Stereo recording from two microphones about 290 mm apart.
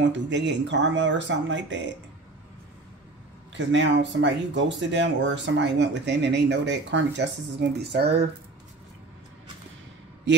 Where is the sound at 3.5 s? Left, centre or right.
Right.